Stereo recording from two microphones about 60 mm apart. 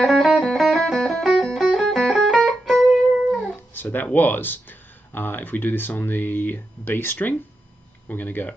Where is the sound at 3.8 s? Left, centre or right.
Left.